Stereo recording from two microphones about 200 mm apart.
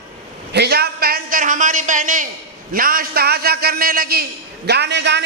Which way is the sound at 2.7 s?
45° right (ahead or behind).